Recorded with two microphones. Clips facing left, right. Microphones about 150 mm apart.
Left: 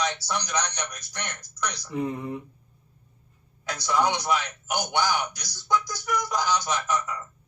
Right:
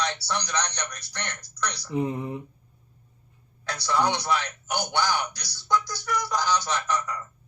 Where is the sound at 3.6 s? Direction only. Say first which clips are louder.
Even; 10° left (ahead or behind).